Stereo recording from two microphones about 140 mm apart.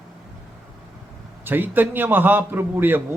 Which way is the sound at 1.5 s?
15° right (ahead or behind).